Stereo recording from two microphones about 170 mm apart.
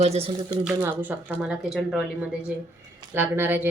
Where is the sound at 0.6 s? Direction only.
10° right (ahead or behind).